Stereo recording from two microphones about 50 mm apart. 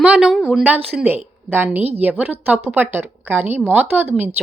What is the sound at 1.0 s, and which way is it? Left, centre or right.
A woman's voice, right.